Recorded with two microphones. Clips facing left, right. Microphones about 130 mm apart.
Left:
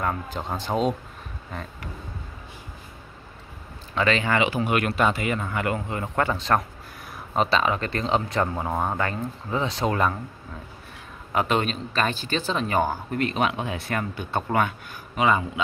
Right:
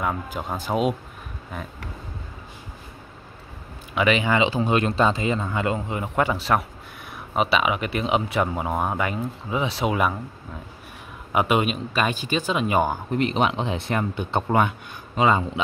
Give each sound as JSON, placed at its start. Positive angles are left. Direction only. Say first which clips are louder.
{"t": 0.0, "sound": "speech", "louder": "right 1 dB", "side_deg": -5}
{"t": 3.9, "sound": "speech", "louder": "right 2 dB", "side_deg": -15}
{"t": 11.3, "sound": "speech", "louder": "right 2 dB", "side_deg": -10}